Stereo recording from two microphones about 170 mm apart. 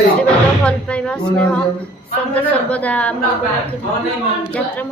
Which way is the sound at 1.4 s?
5° left (ahead or behind).